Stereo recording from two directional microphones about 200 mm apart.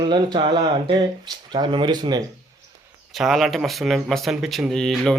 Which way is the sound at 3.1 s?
Centre (ahead or behind).